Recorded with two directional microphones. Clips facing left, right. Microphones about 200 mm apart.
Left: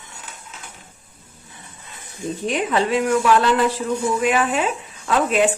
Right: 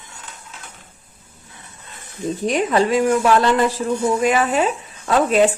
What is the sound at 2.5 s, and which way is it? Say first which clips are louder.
A woman's voice: right 3 dB; 40° right (ahead or behind).